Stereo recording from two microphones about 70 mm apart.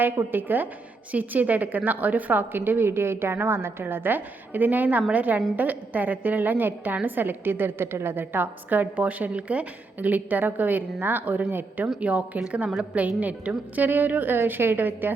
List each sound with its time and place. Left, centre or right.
0.3 s a woman's voice: right